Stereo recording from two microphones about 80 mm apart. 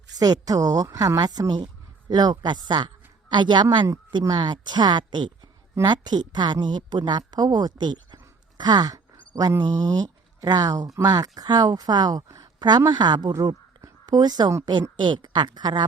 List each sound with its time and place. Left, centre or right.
0.2 s speech: right
8.5 s a sound: right
9.6 s speech: right
14.6 s speech: right